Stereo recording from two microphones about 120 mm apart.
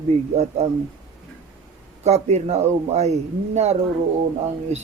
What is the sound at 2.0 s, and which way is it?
Speech, 65° right (ahead or behind).